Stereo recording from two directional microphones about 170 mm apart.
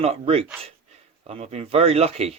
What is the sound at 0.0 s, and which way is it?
Speech, 35° right (ahead or behind).